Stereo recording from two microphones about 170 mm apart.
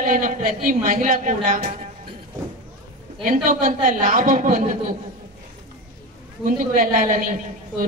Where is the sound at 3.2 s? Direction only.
55° right (ahead or behind).